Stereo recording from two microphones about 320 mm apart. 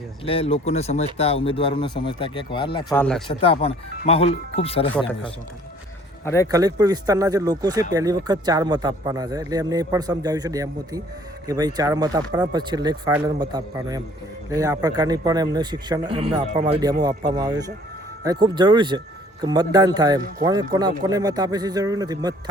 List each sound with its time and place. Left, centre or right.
0.3 s speech: centre
3.2 s speech: centre
6.2 s speech: centre
6.5 s speech: centre